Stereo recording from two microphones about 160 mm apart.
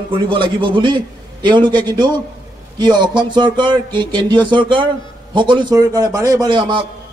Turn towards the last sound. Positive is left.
turn(degrees=-30)  # may be behind; listen again after turning